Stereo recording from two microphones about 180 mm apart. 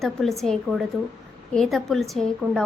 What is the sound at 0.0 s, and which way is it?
A woman's voice, centre (ahead or behind).